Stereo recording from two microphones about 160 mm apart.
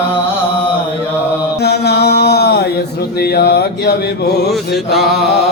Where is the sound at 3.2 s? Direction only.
85° left.